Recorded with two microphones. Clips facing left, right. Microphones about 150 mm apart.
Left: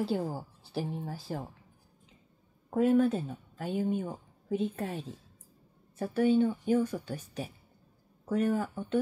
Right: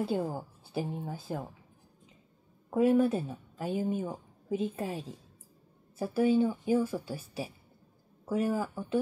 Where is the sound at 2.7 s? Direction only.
10° right (ahead or behind).